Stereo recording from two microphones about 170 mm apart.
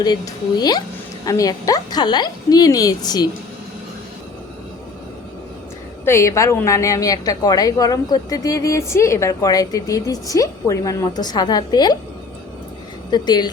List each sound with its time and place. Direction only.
1.2 s a woman's voice: 20° left (ahead or behind)
6.1 s a woman's voice: 15° left (ahead or behind)
13.1 s speech: 25° left (ahead or behind)